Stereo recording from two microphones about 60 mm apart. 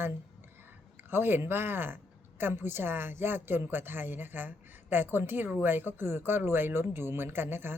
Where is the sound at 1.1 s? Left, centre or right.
Right.